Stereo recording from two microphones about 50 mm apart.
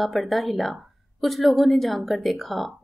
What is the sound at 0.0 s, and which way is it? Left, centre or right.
A woman's voice, centre.